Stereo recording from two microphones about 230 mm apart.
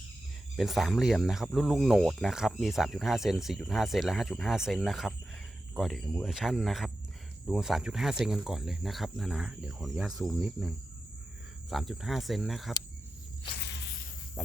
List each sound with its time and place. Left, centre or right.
0.5 s speech: centre
11.7 s speech: centre
13.6 s insect: left
14.4 s speech: centre